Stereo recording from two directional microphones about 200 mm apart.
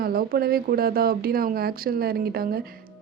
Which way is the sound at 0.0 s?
50° right (ahead or behind).